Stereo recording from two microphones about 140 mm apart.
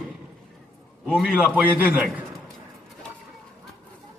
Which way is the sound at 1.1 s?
5° right (ahead or behind).